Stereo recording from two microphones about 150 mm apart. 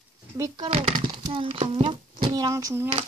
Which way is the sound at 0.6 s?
35° right (ahead or behind).